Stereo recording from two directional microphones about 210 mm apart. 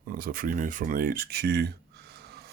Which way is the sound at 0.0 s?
45° right (ahead or behind).